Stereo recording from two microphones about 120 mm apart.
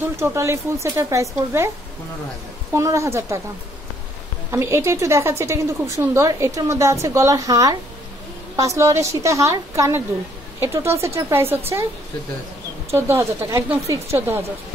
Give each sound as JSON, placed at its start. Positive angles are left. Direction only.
{"t": 0.0, "sound": "a woman's voice", "side_deg": -20}
{"t": 2.7, "sound": "a woman's voice", "side_deg": -25}
{"t": 4.5, "sound": "a woman's voice", "side_deg": -20}
{"t": 12.9, "sound": "a woman's voice", "side_deg": -20}